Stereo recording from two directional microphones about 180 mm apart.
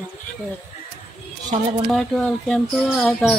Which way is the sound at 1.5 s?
35° right (ahead or behind).